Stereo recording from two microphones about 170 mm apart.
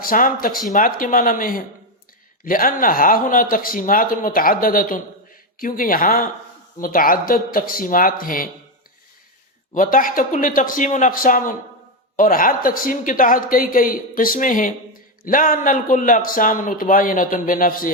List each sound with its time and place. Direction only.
0.0 s a man's voice: 55° left (ahead or behind)
9.7 s a man's voice: 50° left (ahead or behind)